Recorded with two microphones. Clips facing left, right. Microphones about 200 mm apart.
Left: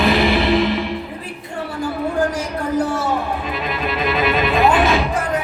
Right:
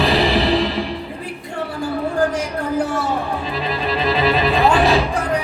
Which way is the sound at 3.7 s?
35° right (ahead or behind).